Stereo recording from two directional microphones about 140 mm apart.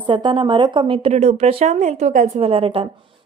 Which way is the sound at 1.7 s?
55° right (ahead or behind).